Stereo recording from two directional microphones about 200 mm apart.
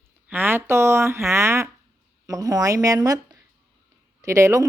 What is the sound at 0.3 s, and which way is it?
A woman's voice, 10° right (ahead or behind).